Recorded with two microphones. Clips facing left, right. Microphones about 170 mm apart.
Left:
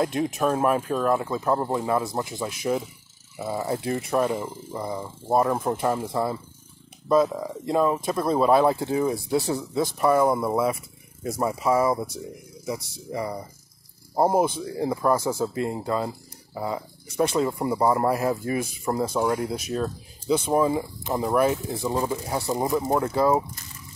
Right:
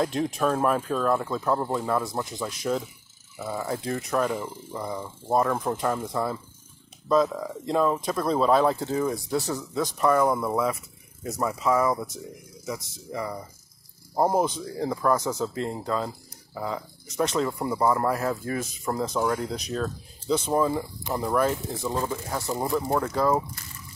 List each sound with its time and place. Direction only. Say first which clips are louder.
0.0 s speech: left 1 dB; 5° left (ahead or behind)
13.1 s speech: left 2 dB; 15° left (ahead or behind)